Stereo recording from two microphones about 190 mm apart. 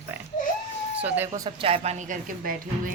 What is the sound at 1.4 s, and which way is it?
Speech, 30° right (ahead or behind).